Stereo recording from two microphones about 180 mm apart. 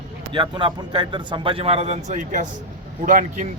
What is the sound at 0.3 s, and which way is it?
A man's voice, 25° right (ahead or behind).